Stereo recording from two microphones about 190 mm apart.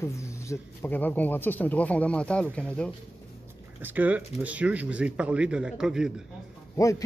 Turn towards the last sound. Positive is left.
turn(degrees=15)  # may be behind; listen again after turning